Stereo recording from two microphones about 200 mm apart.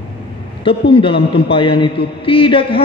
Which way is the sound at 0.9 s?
25° left (ahead or behind).